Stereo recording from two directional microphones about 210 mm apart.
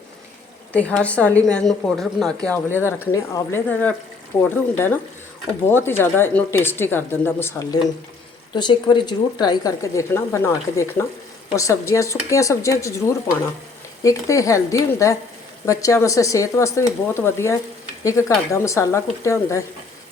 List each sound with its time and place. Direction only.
0.7 s a woman's voice: 5° left (ahead or behind)
6.0 s a woman's voice: 10° left (ahead or behind)